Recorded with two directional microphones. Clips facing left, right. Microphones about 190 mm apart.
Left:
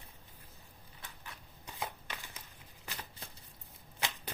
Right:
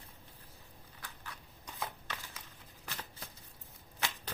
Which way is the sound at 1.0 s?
25° left (ahead or behind).